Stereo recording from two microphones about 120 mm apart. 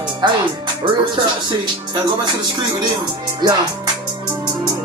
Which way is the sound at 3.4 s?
35° right (ahead or behind).